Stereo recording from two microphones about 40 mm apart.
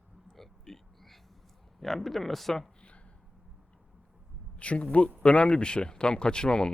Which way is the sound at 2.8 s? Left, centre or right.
Left.